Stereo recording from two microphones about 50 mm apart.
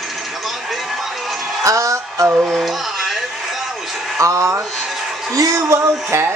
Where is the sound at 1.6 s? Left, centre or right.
Right.